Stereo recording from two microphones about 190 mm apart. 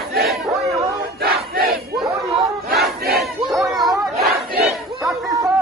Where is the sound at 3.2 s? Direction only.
Centre (ahead or behind).